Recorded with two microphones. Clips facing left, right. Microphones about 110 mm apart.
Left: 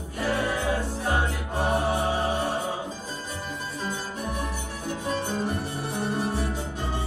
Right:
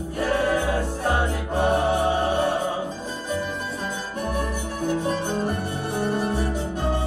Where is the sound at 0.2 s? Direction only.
50° right (ahead or behind).